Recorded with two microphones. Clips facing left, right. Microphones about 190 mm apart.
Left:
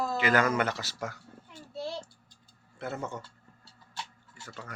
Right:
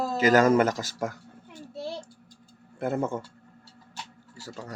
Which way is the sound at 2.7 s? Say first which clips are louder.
Right 8 dB; 50° right (ahead or behind).